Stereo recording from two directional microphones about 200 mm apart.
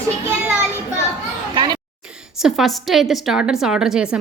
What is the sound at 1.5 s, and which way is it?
Children playing, 20° right (ahead or behind).